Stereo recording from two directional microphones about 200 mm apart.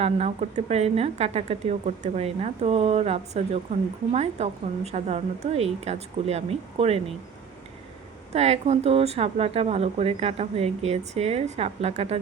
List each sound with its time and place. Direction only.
0.0 s speech: 35° right (ahead or behind)
8.3 s speech: 35° right (ahead or behind)